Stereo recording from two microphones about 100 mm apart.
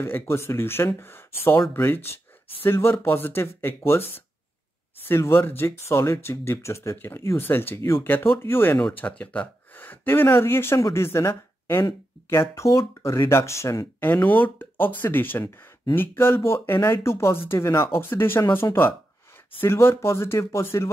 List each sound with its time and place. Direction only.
0.0 s speech: 25° left (ahead or behind)
13.9 s speech: 20° left (ahead or behind)